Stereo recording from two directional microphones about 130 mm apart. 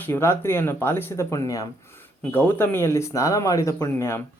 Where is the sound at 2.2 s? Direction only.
15° left (ahead or behind).